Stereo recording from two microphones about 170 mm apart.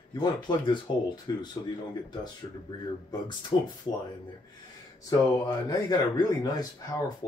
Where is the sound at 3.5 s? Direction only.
30° left (ahead or behind).